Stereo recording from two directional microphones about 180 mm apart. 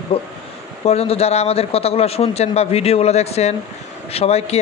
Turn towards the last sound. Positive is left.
turn(degrees=35)  # may be behind; listen again after turning